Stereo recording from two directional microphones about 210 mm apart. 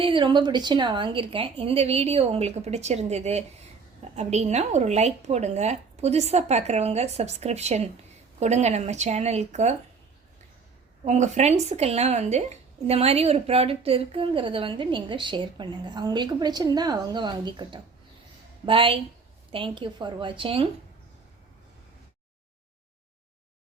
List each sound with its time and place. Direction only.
0.0 s speech: 25° right (ahead or behind)
11.0 s speech: 35° right (ahead or behind)